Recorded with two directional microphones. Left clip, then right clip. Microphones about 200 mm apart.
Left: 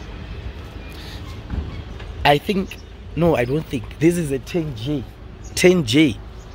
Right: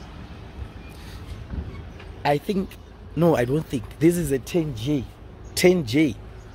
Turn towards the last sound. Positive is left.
turn(degrees=5)  # may be behind; listen again after turning